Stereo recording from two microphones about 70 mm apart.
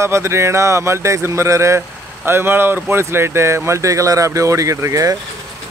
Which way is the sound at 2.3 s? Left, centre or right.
Right.